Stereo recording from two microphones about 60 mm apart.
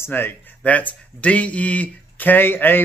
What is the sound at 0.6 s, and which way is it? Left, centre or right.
Speech, left.